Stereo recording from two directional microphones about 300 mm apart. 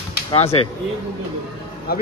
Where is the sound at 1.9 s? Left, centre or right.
Left.